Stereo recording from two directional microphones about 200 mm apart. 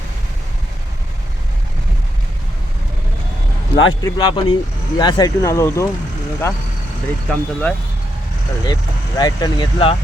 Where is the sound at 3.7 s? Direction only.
75° left (ahead or behind).